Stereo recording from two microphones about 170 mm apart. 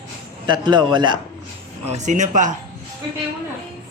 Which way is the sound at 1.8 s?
40° right (ahead or behind).